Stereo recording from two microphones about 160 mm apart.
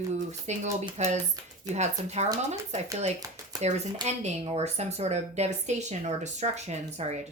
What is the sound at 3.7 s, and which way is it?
A woman's voice, 45° right (ahead or behind).